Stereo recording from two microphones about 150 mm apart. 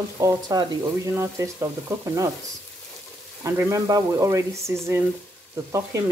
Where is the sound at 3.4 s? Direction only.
20° right (ahead or behind).